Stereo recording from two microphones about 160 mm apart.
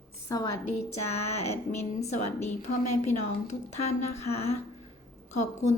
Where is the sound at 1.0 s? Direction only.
40° left (ahead or behind).